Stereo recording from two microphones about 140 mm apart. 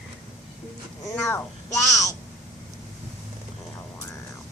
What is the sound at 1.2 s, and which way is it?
Speech, 20° left (ahead or behind).